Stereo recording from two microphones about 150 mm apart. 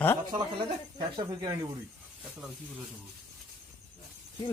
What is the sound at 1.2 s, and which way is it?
Speech, 25° right (ahead or behind).